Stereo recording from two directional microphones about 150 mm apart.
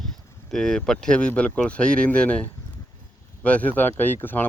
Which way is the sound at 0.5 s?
5° left (ahead or behind).